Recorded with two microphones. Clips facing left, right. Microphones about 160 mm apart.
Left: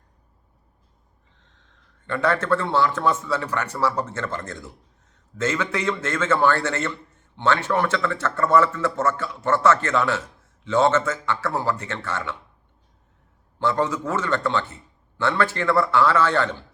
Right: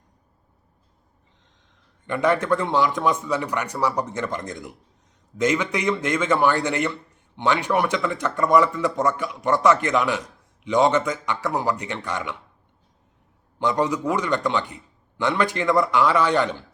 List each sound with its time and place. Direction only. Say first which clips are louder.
1.4 s a man's voice: even; 15° right (ahead or behind)
13.6 s a man's voice: right 1 dB; 15° right (ahead or behind)